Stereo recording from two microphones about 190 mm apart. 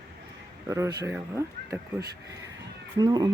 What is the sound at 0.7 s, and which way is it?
Speech, 15° right (ahead or behind).